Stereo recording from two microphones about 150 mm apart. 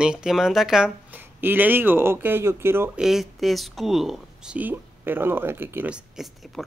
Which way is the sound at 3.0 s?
Centre (ahead or behind).